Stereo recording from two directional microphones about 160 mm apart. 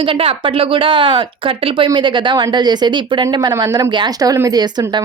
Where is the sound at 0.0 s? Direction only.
35° right (ahead or behind).